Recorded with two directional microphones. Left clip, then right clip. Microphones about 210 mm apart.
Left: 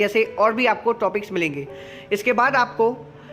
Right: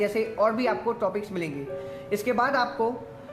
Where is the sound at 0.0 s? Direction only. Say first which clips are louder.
Left 6 dB; 35° left (ahead or behind).